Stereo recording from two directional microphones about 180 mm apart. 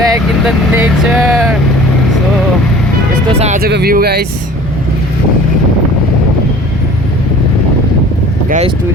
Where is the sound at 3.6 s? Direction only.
60° right (ahead or behind).